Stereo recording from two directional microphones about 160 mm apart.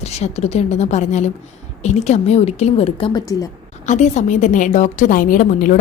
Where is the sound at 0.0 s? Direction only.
40° left (ahead or behind); by 3.5 s 25° left (ahead or behind).